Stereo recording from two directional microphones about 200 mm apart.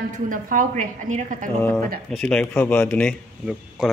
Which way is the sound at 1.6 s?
10° left (ahead or behind).